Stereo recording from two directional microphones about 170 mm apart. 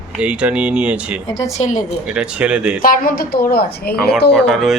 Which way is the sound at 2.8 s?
55° left (ahead or behind).